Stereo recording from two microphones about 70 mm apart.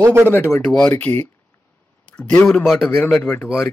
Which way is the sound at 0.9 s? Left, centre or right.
Left.